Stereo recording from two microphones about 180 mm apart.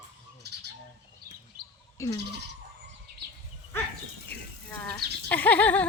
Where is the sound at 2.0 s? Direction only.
15° left (ahead or behind).